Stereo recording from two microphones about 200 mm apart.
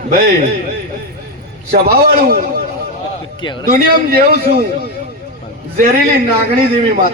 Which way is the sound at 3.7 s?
50° right (ahead or behind).